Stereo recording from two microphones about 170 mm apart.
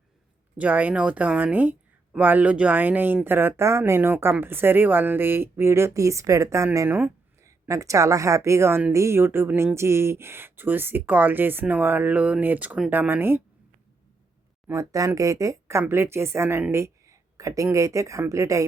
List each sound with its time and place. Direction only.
0.5 s speech: 10° right (ahead or behind)
14.7 s speech: 20° right (ahead or behind)